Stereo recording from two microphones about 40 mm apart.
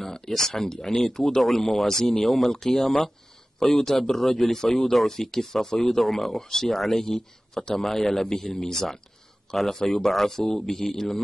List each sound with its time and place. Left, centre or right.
0.0 s speech: centre